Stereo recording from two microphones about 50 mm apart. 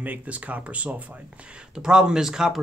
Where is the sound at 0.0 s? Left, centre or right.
Right.